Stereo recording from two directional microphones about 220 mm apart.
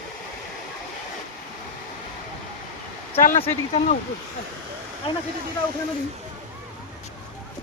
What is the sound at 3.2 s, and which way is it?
Speech, 30° left (ahead or behind).